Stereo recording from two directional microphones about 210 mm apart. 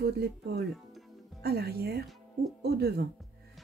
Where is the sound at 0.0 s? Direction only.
50° right (ahead or behind).